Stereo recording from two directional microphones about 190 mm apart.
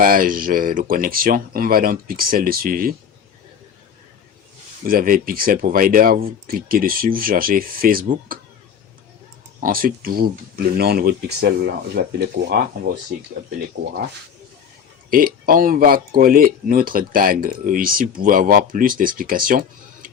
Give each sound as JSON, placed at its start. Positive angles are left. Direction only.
{"t": 0.0, "sound": "speech", "side_deg": -45}
{"t": 4.8, "sound": "speech", "side_deg": -50}
{"t": 9.6, "sound": "speech", "side_deg": -50}
{"t": 15.1, "sound": "speech", "side_deg": -50}